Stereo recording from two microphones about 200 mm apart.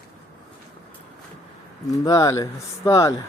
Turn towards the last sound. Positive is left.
turn(degrees=15)  # may be behind; listen again after turning